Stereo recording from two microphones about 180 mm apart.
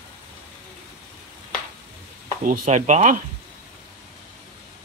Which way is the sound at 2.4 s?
45° right (ahead or behind).